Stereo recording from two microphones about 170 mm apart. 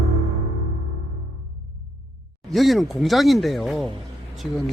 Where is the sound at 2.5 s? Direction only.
Centre (ahead or behind).